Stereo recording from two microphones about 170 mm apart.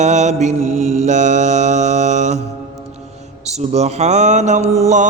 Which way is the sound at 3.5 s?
40° right (ahead or behind).